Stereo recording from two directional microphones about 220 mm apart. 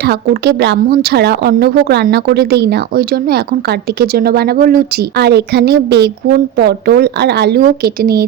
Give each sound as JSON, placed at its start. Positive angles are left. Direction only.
{"t": 0.0, "sound": "speech", "side_deg": -45}